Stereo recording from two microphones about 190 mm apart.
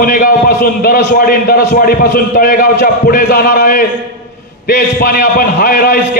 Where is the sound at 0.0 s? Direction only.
50° left (ahead or behind).